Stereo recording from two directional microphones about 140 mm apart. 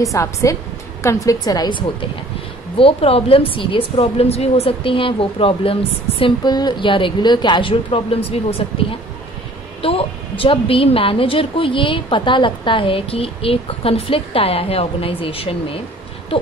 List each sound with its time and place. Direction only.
0.0 s a woman's voice: 25° left (ahead or behind); by 8.6 s 45° left (ahead or behind)
9.8 s a woman's voice: 40° left (ahead or behind)